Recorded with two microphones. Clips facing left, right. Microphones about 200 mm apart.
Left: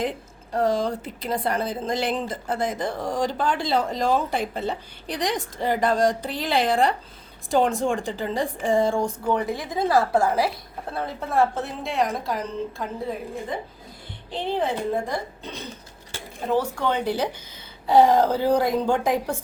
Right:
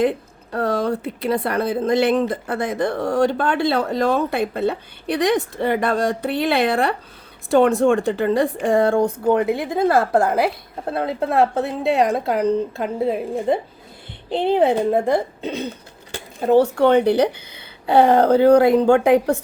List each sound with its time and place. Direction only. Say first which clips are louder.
0.5 s a woman's voice: right 2 dB; 65° right (ahead or behind)